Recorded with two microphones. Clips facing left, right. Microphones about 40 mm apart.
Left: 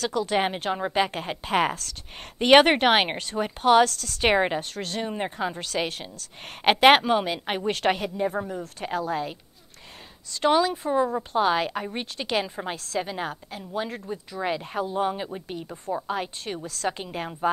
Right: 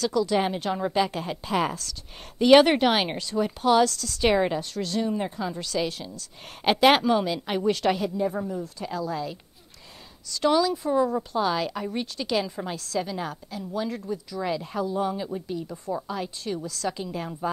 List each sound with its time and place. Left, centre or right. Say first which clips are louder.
0.0 s a woman's voice: right 1 dB; left
10.3 s a woman's voice: left 1 dB; left
10.9 s speech: even; left
11.3 s a woman's voice: left 5 dB; left